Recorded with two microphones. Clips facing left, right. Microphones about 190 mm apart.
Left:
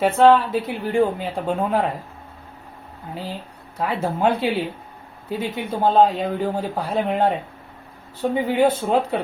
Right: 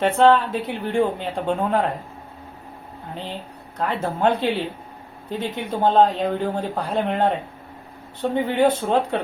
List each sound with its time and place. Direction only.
0.0 s speech: 5° left (ahead or behind)
3.8 s speech: 5° left (ahead or behind)